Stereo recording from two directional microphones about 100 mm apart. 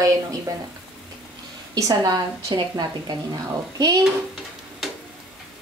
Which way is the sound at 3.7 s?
35° right (ahead or behind).